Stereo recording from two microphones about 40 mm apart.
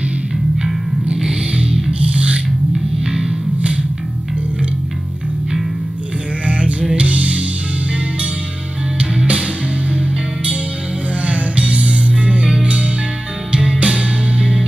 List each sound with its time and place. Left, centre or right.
1.6 s music: right
6.4 s music: right
9.0 s music: right
13.5 s music: right